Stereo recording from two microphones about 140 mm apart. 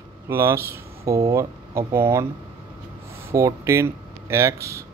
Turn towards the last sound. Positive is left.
turn(degrees=-20)  # may be behind; listen again after turning